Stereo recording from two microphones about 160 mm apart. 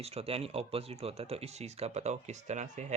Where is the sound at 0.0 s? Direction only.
40° right (ahead or behind).